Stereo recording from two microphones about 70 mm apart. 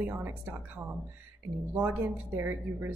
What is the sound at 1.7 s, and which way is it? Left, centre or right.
A woman's voice, right.